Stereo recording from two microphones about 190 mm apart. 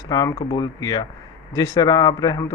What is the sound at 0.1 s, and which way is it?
Speech, 20° left (ahead or behind).